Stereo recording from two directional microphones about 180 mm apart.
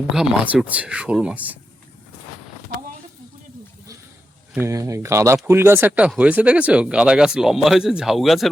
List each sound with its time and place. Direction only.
0.1 s speech: 5° right (ahead or behind)
4.5 s speech: 15° right (ahead or behind)